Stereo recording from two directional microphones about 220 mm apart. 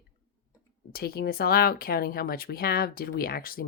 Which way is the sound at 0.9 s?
45° left (ahead or behind).